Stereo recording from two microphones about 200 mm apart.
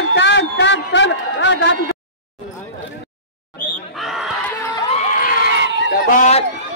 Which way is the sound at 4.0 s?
Centre (ahead or behind).